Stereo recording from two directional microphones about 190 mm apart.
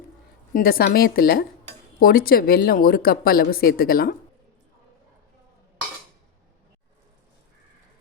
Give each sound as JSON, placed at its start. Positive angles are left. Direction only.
{"t": 0.5, "sound": "speech", "side_deg": 50}